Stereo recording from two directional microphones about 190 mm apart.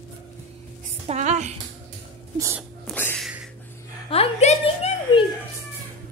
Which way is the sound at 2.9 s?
10° left (ahead or behind).